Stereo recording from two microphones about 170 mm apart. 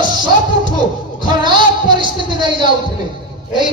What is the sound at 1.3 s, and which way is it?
A man's voice, 25° right (ahead or behind).